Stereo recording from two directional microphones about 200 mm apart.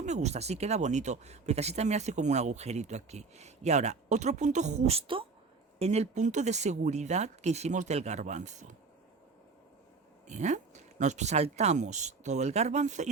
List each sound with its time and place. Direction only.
0.0 s speech: 35° right (ahead or behind)
10.2 s speech: 35° right (ahead or behind)